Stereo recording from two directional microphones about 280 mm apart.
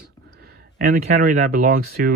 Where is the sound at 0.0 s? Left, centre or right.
Right.